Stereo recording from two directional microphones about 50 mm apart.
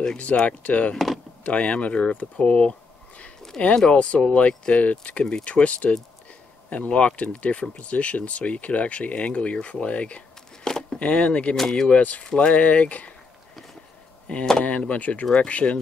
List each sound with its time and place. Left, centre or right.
0.3 s speech: centre
0.9 s speech: centre
1.4 s speech: left
10.6 s a sound: centre
11.0 s speech: left
14.6 s speech: left